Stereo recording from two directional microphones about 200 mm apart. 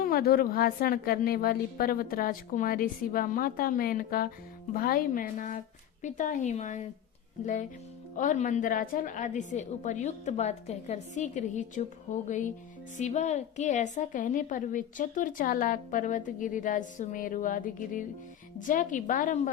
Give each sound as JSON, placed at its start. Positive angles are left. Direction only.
{"t": 0.0, "sound": "a woman's voice", "side_deg": 50}